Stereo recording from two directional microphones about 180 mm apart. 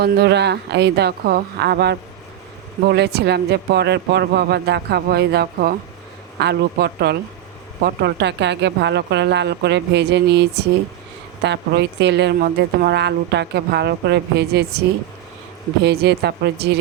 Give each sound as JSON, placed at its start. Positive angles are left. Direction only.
{"t": 0.0, "sound": "a woman's voice", "side_deg": -65}
{"t": 11.4, "sound": "a woman's voice", "side_deg": -70}
{"t": 15.8, "sound": "speech", "side_deg": -65}